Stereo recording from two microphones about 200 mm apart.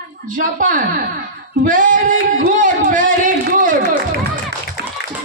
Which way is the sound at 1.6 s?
40° right (ahead or behind).